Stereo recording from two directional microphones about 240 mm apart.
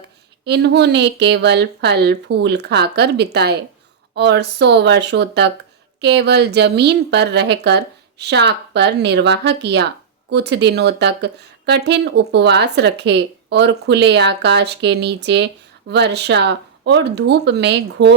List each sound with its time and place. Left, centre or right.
0.4 s speech: right